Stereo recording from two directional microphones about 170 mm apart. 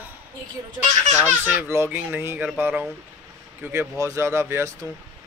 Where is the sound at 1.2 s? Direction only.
10° right (ahead or behind).